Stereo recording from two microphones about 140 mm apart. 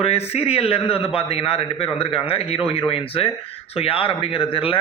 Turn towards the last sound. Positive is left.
turn(degrees=40)  # may be behind; listen again after turning